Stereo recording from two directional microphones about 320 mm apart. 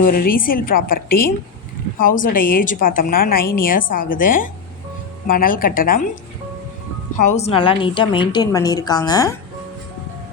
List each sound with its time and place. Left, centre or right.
0.0 s a woman's voice: left
7.2 s a woman's voice: left